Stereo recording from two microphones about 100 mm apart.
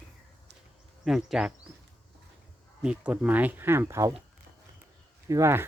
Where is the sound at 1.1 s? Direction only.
5° right (ahead or behind).